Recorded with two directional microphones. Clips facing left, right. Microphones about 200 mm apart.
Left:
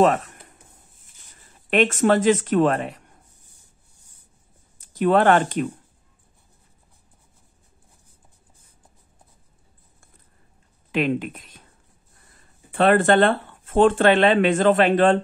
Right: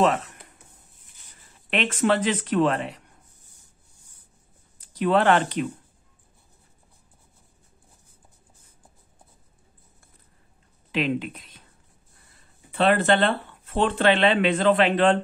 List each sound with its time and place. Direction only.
0.0 s speech: 45° left (ahead or behind)
1.7 s speech: 45° left (ahead or behind)
4.7 s speech: 45° left (ahead or behind)
10.9 s speech: 50° left (ahead or behind)
12.7 s speech: 50° left (ahead or behind)